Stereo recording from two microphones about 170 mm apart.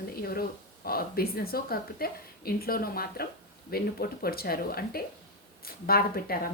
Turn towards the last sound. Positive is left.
turn(degrees=60)  # may be behind; listen again after turning